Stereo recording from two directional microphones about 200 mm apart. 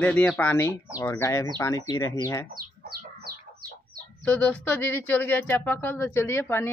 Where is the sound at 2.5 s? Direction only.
50° right (ahead or behind).